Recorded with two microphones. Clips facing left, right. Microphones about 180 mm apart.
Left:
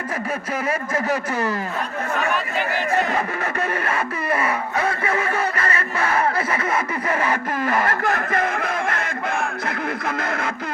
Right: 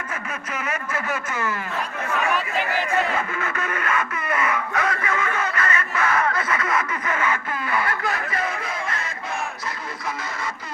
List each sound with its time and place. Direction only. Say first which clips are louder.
0.7 s speech: left 5 dB; 35° left (ahead or behind)
2.9 s speech: left 4 dB; 35° left (ahead or behind); by 9.1 s 55° left (ahead or behind)
9.6 s music: left 6 dB; 55° left (ahead or behind)